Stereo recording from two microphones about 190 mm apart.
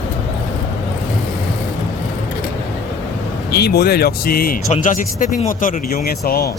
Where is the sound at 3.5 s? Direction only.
60° left (ahead or behind).